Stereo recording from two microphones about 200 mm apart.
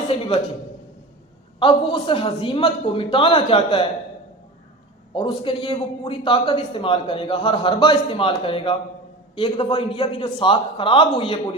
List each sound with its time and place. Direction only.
1.5 s a man's voice: 25° left (ahead or behind)
5.1 s a man's voice: 25° left (ahead or behind)